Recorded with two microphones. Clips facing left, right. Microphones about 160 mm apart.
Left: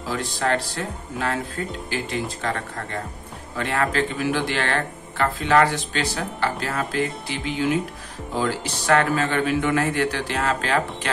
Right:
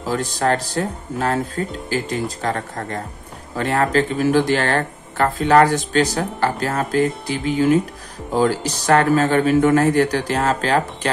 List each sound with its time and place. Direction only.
0.0 s speech: 40° right (ahead or behind)